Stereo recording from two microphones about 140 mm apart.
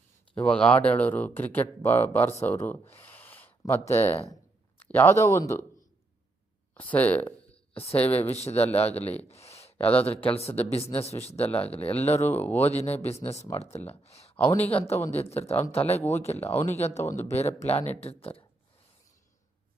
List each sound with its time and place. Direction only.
0.3 s speech: 10° left (ahead or behind)
6.7 s speech: 10° left (ahead or behind)
7.9 s speech: 45° left (ahead or behind)
9.3 s a sound: 50° left (ahead or behind)
9.7 s speech: 10° left (ahead or behind)
10.3 s speech: 45° left (ahead or behind)
12.4 s speech: 15° left (ahead or behind)
12.6 s speech: 50° left (ahead or behind)
14.0 s a sound: 45° left (ahead or behind)
14.8 s speech: 20° left (ahead or behind)
15.2 s speech: 45° left (ahead or behind)